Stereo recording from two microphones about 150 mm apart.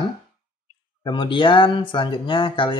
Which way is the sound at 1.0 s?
30° left (ahead or behind).